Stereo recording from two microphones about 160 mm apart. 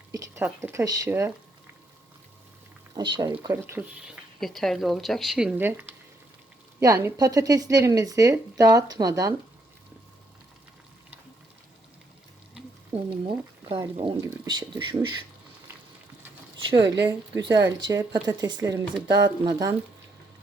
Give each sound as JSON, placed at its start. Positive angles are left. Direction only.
{"t": 0.1, "sound": "speech", "side_deg": -15}
{"t": 2.9, "sound": "speech", "side_deg": -25}
{"t": 3.5, "sound": "speech", "side_deg": -10}
{"t": 12.9, "sound": "speech", "side_deg": -35}
{"t": 14.3, "sound": "speech", "side_deg": -25}
{"t": 16.6, "sound": "speech", "side_deg": -30}
{"t": 16.8, "sound": "speech", "side_deg": -90}
{"t": 17.1, "sound": "speech", "side_deg": -25}